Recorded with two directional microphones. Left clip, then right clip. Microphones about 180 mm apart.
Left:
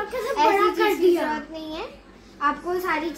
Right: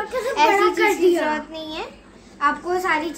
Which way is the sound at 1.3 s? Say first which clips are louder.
Right 4 dB; 15° right (ahead or behind).